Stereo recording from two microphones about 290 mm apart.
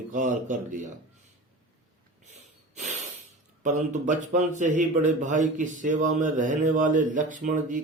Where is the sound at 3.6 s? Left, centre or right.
Right.